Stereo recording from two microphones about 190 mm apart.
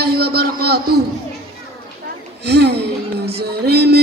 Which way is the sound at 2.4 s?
60° right (ahead or behind).